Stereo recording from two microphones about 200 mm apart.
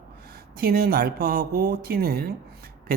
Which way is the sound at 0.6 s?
50° right (ahead or behind).